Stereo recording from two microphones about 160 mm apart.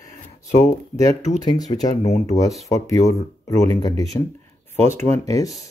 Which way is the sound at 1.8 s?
45° left (ahead or behind).